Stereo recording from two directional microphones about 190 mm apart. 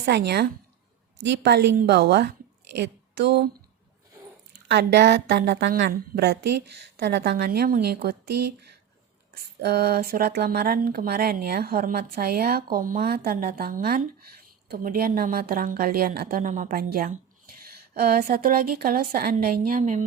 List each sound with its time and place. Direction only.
0.0 s a woman's voice: 60° right (ahead or behind)
4.7 s a woman's voice: 65° right (ahead or behind); by 20.1 s 40° right (ahead or behind)